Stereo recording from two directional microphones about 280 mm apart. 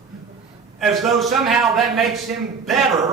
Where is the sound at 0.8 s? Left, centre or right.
Centre.